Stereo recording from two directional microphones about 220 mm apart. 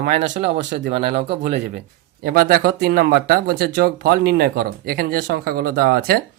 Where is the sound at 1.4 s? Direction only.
35° right (ahead or behind).